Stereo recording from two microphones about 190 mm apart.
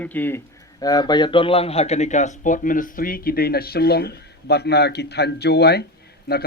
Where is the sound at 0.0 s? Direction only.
10° left (ahead or behind).